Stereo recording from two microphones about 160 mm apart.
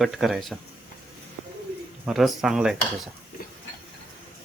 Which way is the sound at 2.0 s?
Centre (ahead or behind).